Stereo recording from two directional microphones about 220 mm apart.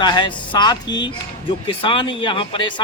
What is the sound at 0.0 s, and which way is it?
Speech, 20° left (ahead or behind).